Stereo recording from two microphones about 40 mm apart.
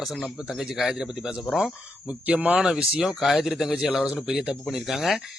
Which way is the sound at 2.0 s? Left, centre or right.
Right.